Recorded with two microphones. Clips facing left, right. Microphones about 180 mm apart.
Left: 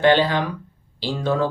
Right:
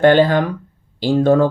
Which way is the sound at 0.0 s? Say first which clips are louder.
Right 5 dB; 50° right (ahead or behind).